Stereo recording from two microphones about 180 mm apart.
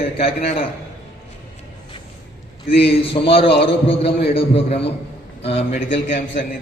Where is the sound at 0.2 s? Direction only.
30° left (ahead or behind).